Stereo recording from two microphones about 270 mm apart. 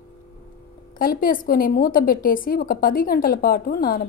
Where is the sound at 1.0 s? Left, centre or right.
Left.